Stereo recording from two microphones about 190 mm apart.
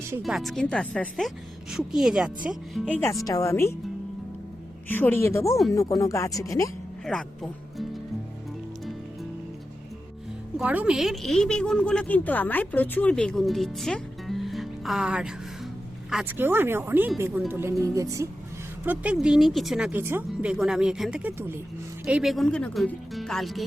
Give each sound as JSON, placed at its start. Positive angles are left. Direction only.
{"t": 0.2, "sound": "a woman's voice", "side_deg": 0}
{"t": 4.9, "sound": "speech", "side_deg": 10}
{"t": 7.0, "sound": "speech", "side_deg": 5}
{"t": 10.6, "sound": "a woman's voice", "side_deg": -5}
{"t": 18.9, "sound": "a woman's voice", "side_deg": -5}